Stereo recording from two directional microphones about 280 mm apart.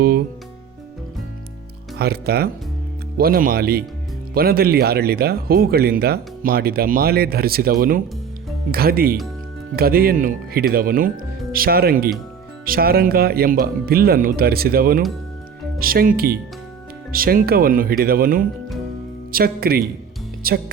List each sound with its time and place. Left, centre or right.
2.0 s speech: right